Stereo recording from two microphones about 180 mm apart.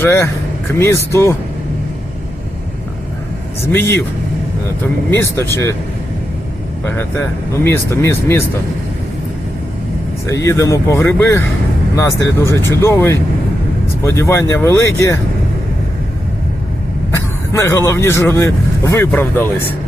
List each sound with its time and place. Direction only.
0.0 s speech: 15° left (ahead or behind)
3.7 s speech: 15° left (ahead or behind)
5.1 s speech: 15° left (ahead or behind)
6.8 s speech: 15° left (ahead or behind)
10.2 s speech: 15° left (ahead or behind)
17.2 s speech: 15° left (ahead or behind)